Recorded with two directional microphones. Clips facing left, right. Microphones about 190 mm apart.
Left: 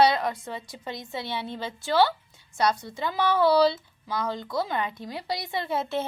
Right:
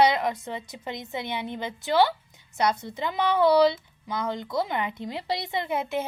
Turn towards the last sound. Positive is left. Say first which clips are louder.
# even
turn(degrees=-15)  # may be behind; listen again after turning